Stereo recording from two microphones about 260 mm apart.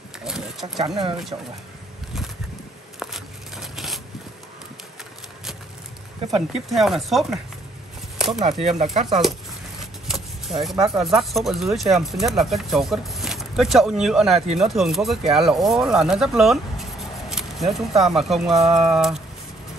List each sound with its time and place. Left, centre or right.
0.2 s a sound: centre
0.7 s speech: centre
3.0 s a sound: centre
6.3 s speech: centre
8.4 s speech: right
10.0 s speech: centre